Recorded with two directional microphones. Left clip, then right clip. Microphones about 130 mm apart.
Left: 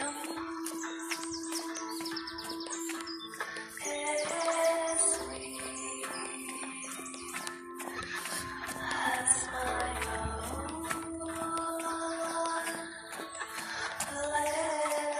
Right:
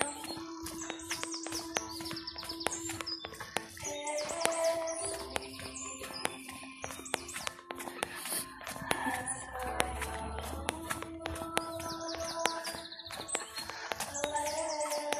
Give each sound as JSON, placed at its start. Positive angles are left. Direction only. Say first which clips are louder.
{"t": 1.0, "sound": "music", "louder": "left 2 dB", "side_deg": 20}
{"t": 3.8, "sound": "music", "louder": "left 6 dB", "side_deg": 30}
{"t": 8.9, "sound": "music", "louder": "left 5 dB", "side_deg": 30}
{"t": 13.7, "sound": "music", "louder": "left 1 dB", "side_deg": 30}